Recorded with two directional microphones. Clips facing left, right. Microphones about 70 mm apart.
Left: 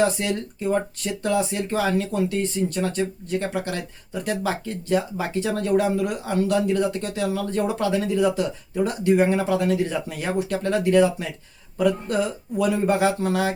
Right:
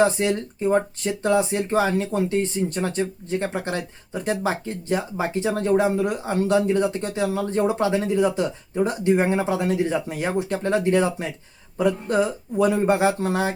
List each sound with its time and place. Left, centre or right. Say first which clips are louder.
0.0 s speech: right 2 dB; right